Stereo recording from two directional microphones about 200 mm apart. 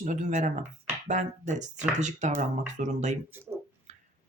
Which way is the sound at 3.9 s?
35° right (ahead or behind).